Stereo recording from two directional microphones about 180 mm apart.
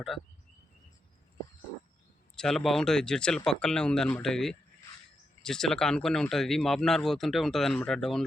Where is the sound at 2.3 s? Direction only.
5° left (ahead or behind).